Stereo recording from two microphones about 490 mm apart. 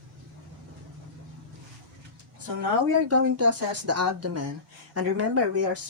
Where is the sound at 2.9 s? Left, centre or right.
Right.